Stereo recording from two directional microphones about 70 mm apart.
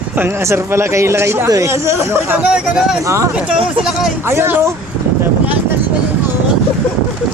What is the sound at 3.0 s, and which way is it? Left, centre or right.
Speech, right.